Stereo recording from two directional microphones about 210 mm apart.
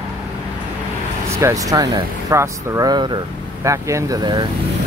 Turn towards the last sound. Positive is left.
turn(degrees=-20)  # may be behind; listen again after turning